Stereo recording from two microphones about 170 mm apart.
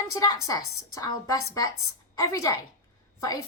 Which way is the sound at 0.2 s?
20° left (ahead or behind).